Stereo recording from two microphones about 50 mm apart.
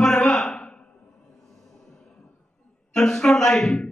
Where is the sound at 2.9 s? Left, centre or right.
Centre.